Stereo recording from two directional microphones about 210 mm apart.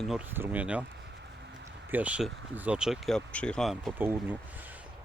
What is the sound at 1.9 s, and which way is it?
Speech, 5° right (ahead or behind).